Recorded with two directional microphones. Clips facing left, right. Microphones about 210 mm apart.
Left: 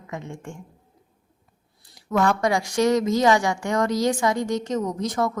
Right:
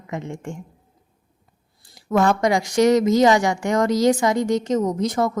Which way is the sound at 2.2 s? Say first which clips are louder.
Right 1 dB; 20° right (ahead or behind).